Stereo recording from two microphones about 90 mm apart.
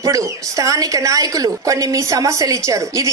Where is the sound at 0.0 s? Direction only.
35° right (ahead or behind).